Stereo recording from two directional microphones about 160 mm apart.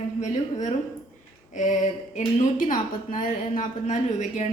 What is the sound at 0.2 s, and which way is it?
A woman's voice, 50° left (ahead or behind).